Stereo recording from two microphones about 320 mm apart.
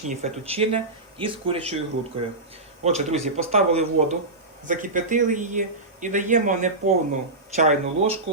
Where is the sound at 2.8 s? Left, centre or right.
Centre.